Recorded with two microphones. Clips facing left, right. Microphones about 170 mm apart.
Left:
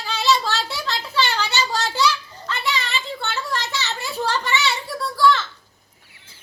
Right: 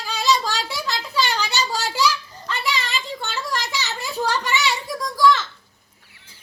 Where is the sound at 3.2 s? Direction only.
10° right (ahead or behind).